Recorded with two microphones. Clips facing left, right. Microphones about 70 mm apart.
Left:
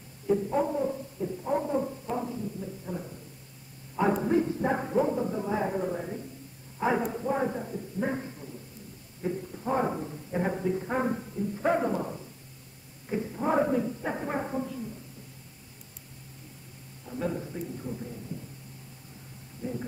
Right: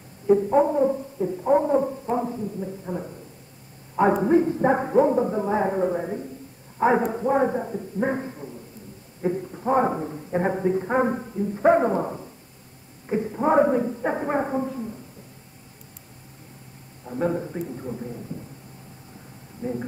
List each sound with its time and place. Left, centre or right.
0.3 s speech: right
17.0 s speech: right
19.6 s speech: right